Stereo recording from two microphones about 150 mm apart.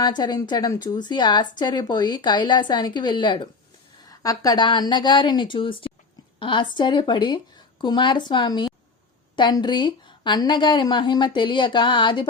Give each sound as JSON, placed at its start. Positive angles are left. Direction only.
{"t": 0.0, "sound": "a woman's voice", "side_deg": 30}